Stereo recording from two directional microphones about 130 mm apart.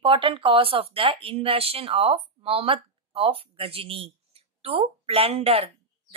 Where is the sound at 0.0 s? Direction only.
40° right (ahead or behind).